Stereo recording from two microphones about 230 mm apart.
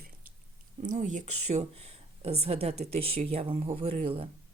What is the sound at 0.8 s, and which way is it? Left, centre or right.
Speech, right.